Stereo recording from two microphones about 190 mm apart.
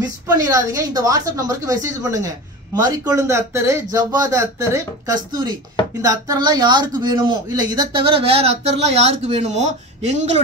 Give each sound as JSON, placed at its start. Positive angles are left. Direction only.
{"t": 0.0, "sound": "speech", "side_deg": -20}